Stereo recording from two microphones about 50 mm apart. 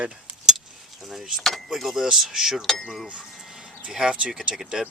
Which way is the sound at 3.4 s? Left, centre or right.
Centre.